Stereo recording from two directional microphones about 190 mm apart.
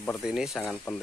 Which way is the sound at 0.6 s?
10° left (ahead or behind).